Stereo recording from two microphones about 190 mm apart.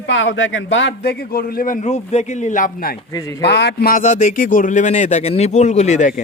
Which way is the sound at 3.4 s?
60° left (ahead or behind).